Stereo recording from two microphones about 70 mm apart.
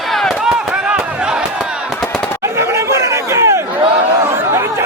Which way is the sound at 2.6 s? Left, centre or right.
Right.